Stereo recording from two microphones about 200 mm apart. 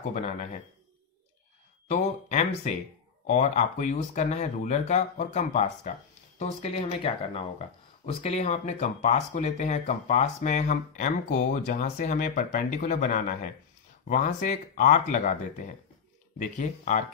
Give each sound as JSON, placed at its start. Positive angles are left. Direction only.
{"t": 0.1, "sound": "speech", "side_deg": 35}
{"t": 1.9, "sound": "speech", "side_deg": 35}
{"t": 16.3, "sound": "speech", "side_deg": 40}